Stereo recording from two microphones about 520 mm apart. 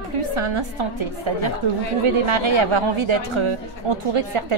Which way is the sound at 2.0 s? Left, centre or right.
Right.